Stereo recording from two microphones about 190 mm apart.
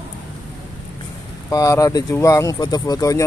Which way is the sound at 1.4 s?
15° left (ahead or behind).